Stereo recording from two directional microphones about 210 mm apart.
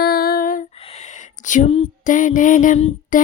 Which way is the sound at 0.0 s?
45° left (ahead or behind).